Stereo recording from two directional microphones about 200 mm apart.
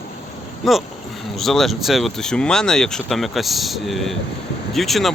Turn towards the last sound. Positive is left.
turn(degrees=0)  # may be behind; listen again after turning